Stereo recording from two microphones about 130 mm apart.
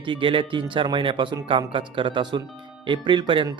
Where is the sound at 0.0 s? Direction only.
40° right (ahead or behind).